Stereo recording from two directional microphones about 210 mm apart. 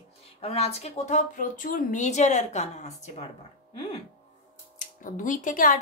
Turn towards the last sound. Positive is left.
turn(degrees=40)  # may be behind; listen again after turning